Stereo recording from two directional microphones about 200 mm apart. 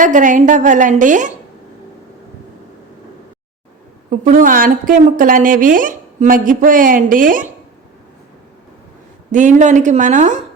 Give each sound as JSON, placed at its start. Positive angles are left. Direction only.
{"t": 0.0, "sound": "a woman's voice", "side_deg": -40}
{"t": 4.1, "sound": "a woman's voice", "side_deg": -40}
{"t": 9.3, "sound": "a woman's voice", "side_deg": -40}